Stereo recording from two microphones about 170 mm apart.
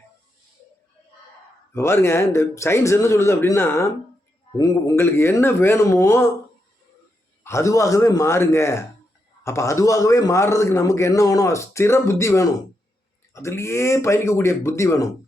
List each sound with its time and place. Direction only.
1.7 s a man's voice: 15° left (ahead or behind)
7.4 s a man's voice: 15° left (ahead or behind)